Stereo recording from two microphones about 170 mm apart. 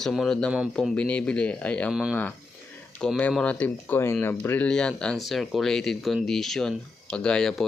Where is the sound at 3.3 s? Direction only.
5° left (ahead or behind).